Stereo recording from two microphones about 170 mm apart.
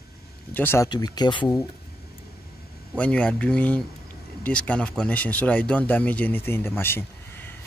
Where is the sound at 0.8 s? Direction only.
25° left (ahead or behind).